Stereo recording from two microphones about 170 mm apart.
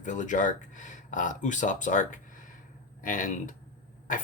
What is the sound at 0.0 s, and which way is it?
Speech, 50° left (ahead or behind).